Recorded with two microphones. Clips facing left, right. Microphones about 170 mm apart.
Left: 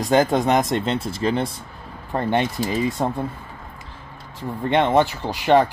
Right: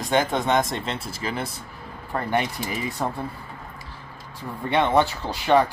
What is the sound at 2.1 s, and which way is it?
Speech, 25° left (ahead or behind).